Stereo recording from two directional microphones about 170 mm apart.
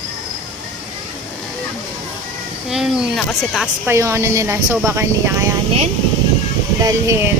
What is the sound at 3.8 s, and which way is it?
Speech, 15° right (ahead or behind).